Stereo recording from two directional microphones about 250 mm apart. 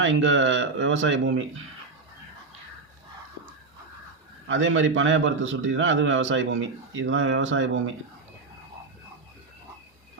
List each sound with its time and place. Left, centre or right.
0.0 s a man's voice: right
4.4 s a man's voice: right